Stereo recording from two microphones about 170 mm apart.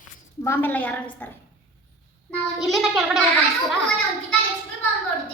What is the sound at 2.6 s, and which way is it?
Speech, centre (ahead or behind).